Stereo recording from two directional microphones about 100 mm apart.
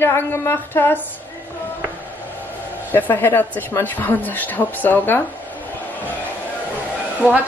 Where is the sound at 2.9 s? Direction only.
25° left (ahead or behind).